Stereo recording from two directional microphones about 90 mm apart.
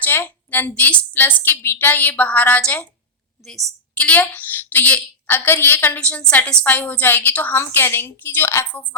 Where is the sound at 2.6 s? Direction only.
15° left (ahead or behind).